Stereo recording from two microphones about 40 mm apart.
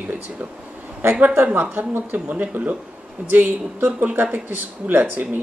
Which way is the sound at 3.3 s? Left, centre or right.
Right.